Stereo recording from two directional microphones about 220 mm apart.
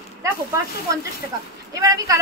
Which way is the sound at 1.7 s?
15° right (ahead or behind).